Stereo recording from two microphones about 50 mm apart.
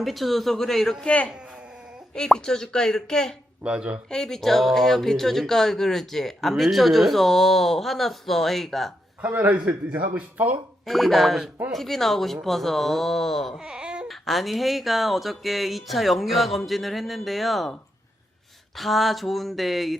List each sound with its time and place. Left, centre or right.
0.0 s speech: centre
1.0 s speech: left
2.1 s speech: centre
3.6 s speech: right
4.1 s speech: centre
9.5 s speech: right
10.8 s speech: centre
13.6 s baby cry: centre
14.1 s speech: centre
18.8 s speech: centre